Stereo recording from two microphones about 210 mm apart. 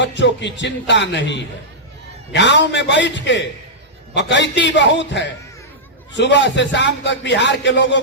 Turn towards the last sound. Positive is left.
turn(degrees=60)  # may be behind; listen again after turning